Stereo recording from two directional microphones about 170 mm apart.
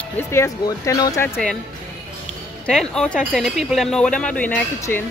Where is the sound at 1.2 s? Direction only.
5° right (ahead or behind).